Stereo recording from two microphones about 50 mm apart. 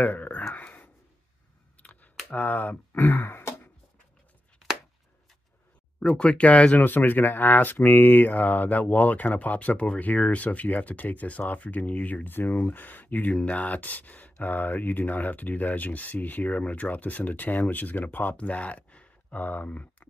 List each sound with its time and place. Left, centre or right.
0.0 s a sound: left
0.6 s whispering: left
2.3 s speech: left
5.9 s speech: left
6.8 s speech: left
18.3 s a sound: left
19.4 s speech: left